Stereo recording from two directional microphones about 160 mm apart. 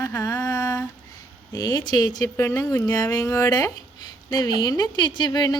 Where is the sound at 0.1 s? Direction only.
20° left (ahead or behind).